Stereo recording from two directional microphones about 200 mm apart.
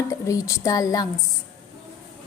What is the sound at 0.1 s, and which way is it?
Speech, 15° left (ahead or behind).